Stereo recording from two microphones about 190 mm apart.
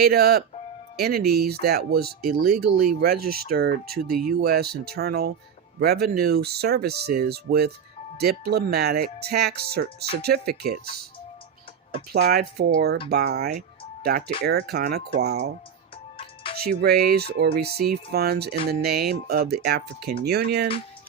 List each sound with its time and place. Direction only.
0.0 s speech: 55° right (ahead or behind)
12.1 s speech: 55° right (ahead or behind)
16.1 s music: 25° left (ahead or behind)
16.6 s speech: 55° right (ahead or behind)